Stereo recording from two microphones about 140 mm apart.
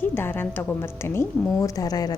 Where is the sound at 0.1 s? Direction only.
15° left (ahead or behind).